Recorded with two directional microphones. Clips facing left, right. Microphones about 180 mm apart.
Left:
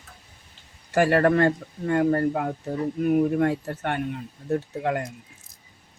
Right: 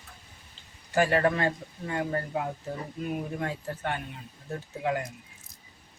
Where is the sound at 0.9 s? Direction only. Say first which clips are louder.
Left 5 dB; 65° left (ahead or behind).